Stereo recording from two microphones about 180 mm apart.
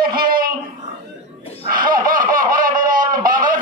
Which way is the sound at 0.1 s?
55° right (ahead or behind).